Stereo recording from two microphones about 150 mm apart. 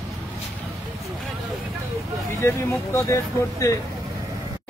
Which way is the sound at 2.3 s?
15° left (ahead or behind).